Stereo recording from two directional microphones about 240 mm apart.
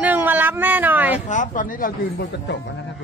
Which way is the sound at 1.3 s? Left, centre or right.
Left.